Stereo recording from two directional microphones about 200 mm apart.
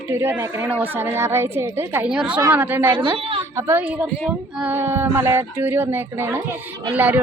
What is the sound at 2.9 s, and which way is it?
Speech, 25° right (ahead or behind).